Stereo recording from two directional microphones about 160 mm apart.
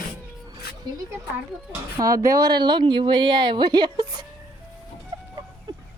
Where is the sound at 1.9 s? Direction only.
20° right (ahead or behind).